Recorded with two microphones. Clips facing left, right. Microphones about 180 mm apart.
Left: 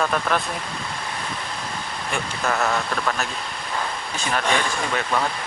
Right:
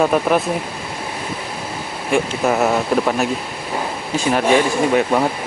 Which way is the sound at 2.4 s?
15° right (ahead or behind).